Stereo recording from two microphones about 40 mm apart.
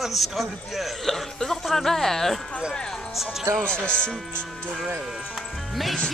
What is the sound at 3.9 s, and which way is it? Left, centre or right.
Speech, left.